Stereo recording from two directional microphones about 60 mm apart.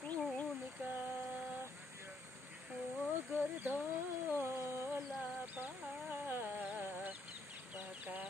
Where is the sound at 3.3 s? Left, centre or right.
Right.